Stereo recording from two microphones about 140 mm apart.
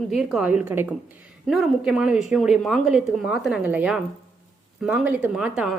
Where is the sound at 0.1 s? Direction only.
5° right (ahead or behind).